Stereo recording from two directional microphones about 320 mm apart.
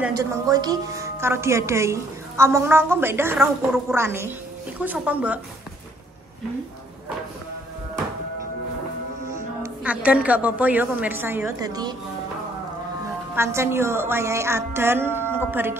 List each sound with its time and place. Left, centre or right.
0.2 s a woman's voice: centre
9.6 s a woman's voice: centre
13.3 s a woman's voice: centre